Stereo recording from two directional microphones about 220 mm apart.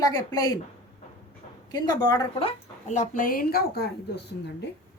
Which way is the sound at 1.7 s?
15° left (ahead or behind).